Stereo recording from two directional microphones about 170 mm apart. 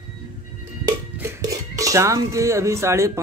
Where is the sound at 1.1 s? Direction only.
15° right (ahead or behind).